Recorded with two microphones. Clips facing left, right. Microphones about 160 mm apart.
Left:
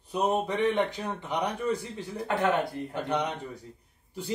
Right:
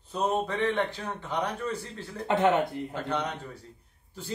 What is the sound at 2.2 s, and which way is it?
Speech, 20° right (ahead or behind).